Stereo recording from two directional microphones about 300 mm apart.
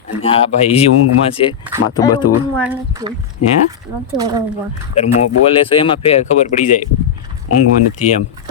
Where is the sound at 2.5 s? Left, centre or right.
Centre.